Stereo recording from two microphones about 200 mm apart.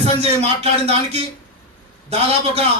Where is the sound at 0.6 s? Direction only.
30° right (ahead or behind).